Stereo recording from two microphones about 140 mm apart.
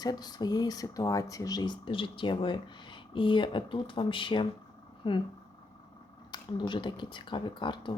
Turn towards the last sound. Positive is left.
turn(degrees=35)  # may be behind; listen again after turning